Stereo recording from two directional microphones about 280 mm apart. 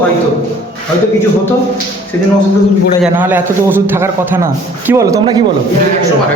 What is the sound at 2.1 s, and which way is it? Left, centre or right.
Speech, centre.